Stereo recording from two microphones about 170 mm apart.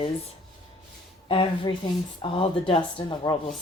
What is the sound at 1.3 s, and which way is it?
Speech, 30° left (ahead or behind).